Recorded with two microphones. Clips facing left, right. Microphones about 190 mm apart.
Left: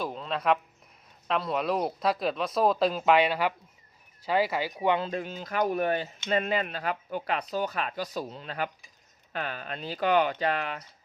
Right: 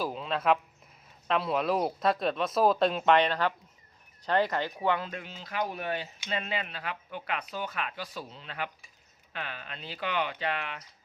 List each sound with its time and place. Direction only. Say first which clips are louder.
0.0 s speech: even; centre (ahead or behind)
4.9 s speech: left 6 dB; 30° left (ahead or behind)
5.2 s speech: left 5 dB; 45° left (ahead or behind)